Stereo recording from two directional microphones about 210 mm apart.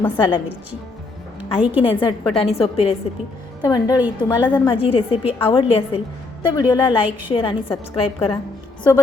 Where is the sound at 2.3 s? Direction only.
25° left (ahead or behind).